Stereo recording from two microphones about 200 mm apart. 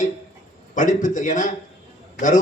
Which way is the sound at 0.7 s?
40° left (ahead or behind).